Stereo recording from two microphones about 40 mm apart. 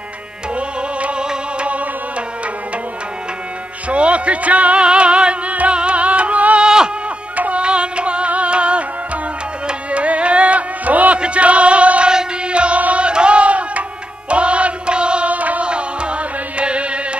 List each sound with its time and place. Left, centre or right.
0.6 s music: right
1.7 s music: right
3.9 s music: right
6.6 s a sound: centre
7.3 s music: right
11.1 s a sound: right
12.1 s chant: right
14.3 s music: right
15.7 s music: right